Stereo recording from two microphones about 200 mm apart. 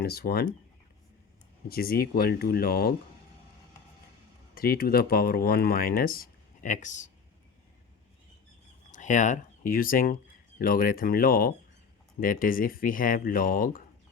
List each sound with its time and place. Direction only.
0.0 s speech: 50° left (ahead or behind)
1.6 s speech: 50° left (ahead or behind)
4.5 s speech: 50° left (ahead or behind)
8.9 s speech: 40° left (ahead or behind)